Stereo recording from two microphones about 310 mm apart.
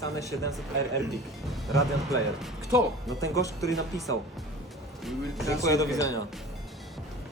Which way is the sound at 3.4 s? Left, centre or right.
Centre.